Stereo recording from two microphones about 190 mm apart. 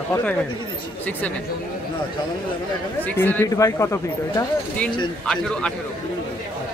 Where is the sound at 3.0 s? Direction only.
10° left (ahead or behind).